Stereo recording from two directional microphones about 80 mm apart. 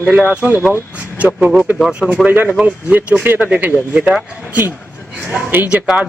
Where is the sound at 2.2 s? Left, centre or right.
Right.